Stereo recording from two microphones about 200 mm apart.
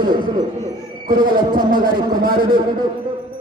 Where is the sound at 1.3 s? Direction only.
45° right (ahead or behind).